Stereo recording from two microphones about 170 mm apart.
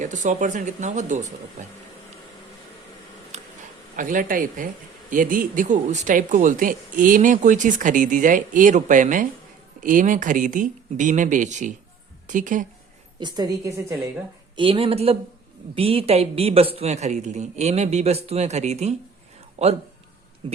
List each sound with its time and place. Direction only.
0.0 s speech: 45° right (ahead or behind)
3.9 s speech: 50° right (ahead or behind)
13.1 s a woman's voice: 25° right (ahead or behind)
14.5 s a man's voice: 30° right (ahead or behind)